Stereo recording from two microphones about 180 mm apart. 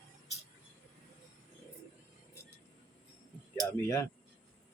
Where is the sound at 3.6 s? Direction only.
15° left (ahead or behind).